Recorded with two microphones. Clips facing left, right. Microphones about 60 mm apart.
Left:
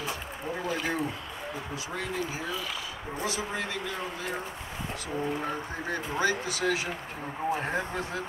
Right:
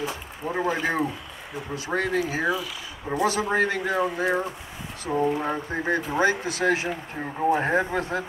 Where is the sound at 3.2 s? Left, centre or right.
Right.